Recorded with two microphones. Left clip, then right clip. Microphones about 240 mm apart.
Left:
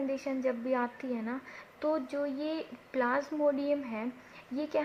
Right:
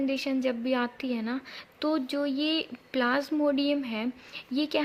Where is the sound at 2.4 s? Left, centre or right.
Right.